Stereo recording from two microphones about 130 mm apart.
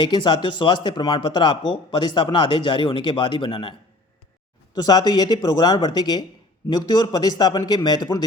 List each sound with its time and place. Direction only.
0.0 s speech: 35° left (ahead or behind)